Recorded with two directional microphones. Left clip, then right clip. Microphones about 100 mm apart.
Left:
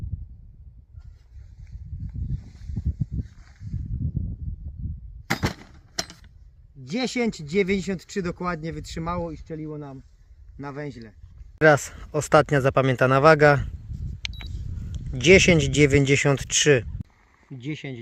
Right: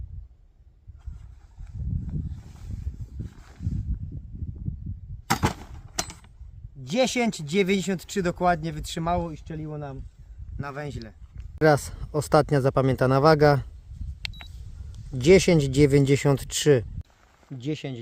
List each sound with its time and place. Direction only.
5.3 s a sound: 30° left (ahead or behind)
6.8 s speech: 25° right (ahead or behind)
11.6 s speech: 5° right (ahead or behind)
15.1 s speech: 15° right (ahead or behind)
17.6 s speech: 55° right (ahead or behind)